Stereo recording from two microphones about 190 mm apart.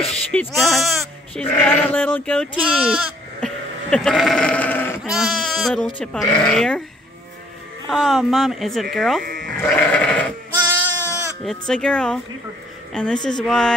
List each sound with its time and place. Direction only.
0.3 s speech: 5° left (ahead or behind)
5.0 s speech: centre (ahead or behind)
7.9 s speech: centre (ahead or behind)
9.2 s sheep: 50° right (ahead or behind)
9.6 s sheep: 5° left (ahead or behind)
10.7 s sheep: 10° right (ahead or behind)
11.4 s speech: 5° left (ahead or behind)